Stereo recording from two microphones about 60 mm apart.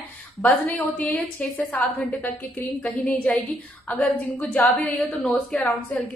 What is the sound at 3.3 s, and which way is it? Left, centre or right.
Speech, left.